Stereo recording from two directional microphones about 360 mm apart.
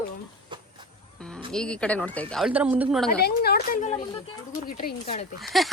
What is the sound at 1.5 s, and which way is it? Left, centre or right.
Speech, centre.